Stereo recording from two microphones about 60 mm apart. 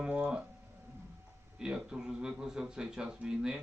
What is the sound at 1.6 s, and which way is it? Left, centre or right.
A man's voice, centre.